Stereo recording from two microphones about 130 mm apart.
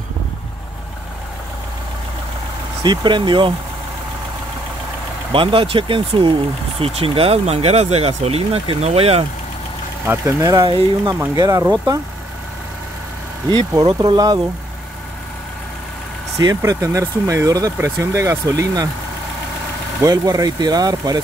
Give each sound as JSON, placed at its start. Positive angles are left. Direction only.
{"t": 2.8, "sound": "speech", "side_deg": -35}
{"t": 5.3, "sound": "speech", "side_deg": -45}
{"t": 10.0, "sound": "speech", "side_deg": -20}
{"t": 11.3, "sound": "speech", "side_deg": -30}
{"t": 13.5, "sound": "speech", "side_deg": -35}
{"t": 16.3, "sound": "speech", "side_deg": -25}
{"t": 20.0, "sound": "speech", "side_deg": -30}